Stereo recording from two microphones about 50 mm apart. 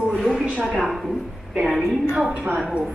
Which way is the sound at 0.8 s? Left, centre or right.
Centre.